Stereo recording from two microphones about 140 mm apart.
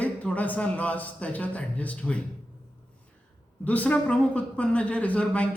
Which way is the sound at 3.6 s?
10° left (ahead or behind).